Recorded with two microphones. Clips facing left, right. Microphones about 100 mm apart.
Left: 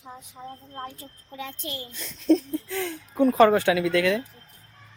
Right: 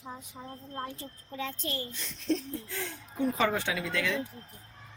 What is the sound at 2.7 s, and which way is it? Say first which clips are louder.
Speech: left 8 dB; 75° left (ahead or behind).